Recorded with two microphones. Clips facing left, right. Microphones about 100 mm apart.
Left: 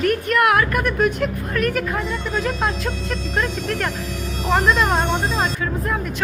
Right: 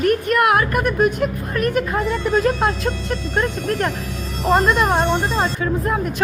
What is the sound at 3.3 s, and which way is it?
Speech, 20° right (ahead or behind).